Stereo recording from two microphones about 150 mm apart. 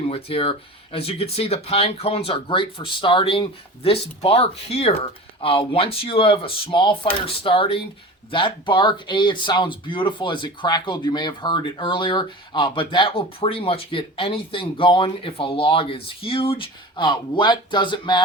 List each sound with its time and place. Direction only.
0.1 s speech: 35° left (ahead or behind)